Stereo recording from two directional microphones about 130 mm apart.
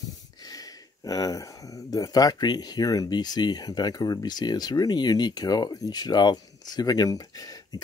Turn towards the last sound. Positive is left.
turn(degrees=30)  # may be behind; listen again after turning